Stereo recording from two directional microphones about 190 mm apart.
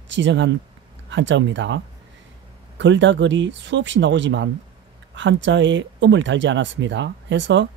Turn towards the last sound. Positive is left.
turn(degrees=-75)  # may be behind; listen again after turning